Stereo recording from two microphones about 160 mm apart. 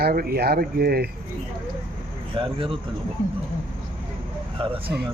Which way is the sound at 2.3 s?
35° right (ahead or behind).